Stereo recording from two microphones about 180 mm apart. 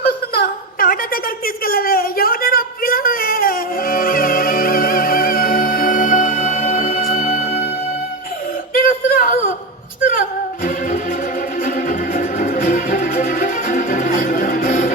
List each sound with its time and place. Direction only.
0.0 s a sound: 55° left (ahead or behind)
7.2 s music: 40° left (ahead or behind)
8.7 s music: 50° left (ahead or behind)